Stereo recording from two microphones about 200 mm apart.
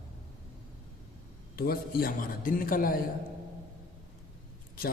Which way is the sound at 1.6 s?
45° left (ahead or behind).